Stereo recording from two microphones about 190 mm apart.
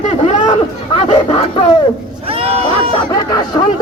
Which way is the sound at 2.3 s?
30° right (ahead or behind).